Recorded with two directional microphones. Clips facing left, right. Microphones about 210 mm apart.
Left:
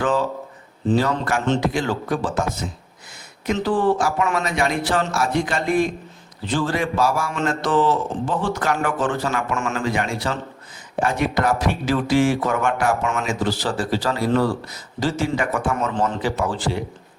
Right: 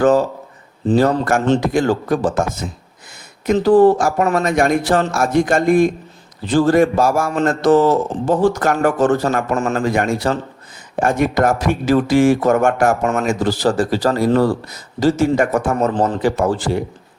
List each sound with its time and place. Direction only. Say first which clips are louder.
0.0 s speech: right 7 dB; 45° right (ahead or behind)
3.4 s speech: right 9 dB; 40° right (ahead or behind)